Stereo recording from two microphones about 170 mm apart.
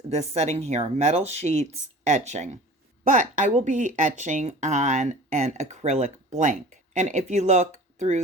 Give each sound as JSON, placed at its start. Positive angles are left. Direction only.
{"t": 0.1, "sound": "speech", "side_deg": -40}